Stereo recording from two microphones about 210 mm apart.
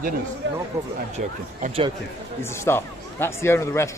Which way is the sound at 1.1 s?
35° right (ahead or behind).